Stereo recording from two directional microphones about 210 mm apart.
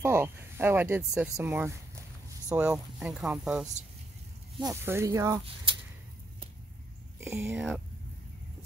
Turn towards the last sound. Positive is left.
turn(degrees=-10)  # may be behind; listen again after turning